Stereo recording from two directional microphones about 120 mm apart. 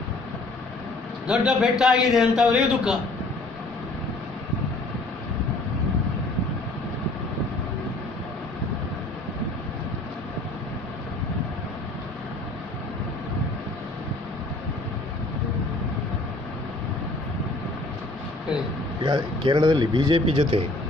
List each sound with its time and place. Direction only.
1.2 s a man's voice: 5° right (ahead or behind)
19.0 s speech: 40° right (ahead or behind)